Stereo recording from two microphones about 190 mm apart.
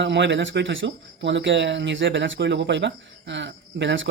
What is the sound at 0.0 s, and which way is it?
Speech, 70° right (ahead or behind).